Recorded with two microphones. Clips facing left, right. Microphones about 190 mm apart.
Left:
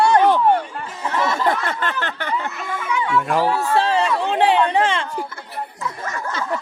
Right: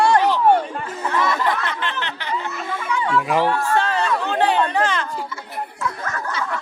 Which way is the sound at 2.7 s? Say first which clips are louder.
Even; 10° left (ahead or behind).